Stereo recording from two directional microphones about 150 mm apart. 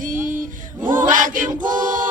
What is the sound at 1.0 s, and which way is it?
Choir, 60° right (ahead or behind).